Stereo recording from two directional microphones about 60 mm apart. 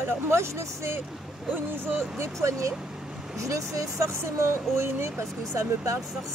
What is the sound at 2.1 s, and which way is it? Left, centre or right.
Speech, right.